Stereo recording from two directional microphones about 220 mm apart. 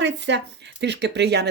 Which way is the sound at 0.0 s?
55° right (ahead or behind).